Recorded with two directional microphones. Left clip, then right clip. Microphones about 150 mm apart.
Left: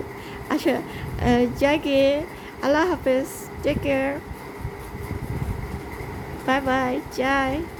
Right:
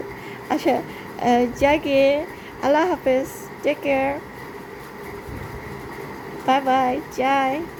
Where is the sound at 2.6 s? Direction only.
15° left (ahead or behind).